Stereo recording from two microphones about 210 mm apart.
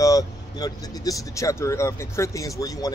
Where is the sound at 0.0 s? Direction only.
15° left (ahead or behind).